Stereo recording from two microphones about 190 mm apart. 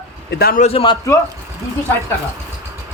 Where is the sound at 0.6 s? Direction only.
30° left (ahead or behind).